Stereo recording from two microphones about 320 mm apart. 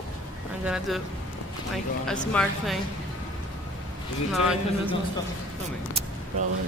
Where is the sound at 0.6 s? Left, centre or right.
Centre.